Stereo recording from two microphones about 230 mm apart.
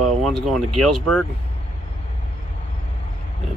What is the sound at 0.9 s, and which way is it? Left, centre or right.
Speech, right.